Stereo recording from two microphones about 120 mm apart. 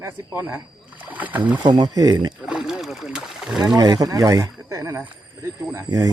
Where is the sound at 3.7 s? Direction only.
35° right (ahead or behind).